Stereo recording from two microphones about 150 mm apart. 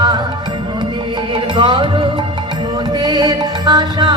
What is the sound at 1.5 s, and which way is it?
Music, 30° right (ahead or behind).